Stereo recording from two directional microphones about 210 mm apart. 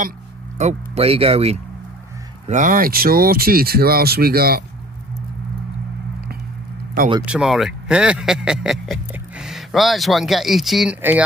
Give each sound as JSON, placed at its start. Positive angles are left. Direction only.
{"t": 0.6, "sound": "speech", "side_deg": -30}
{"t": 7.2, "sound": "speech", "side_deg": 0}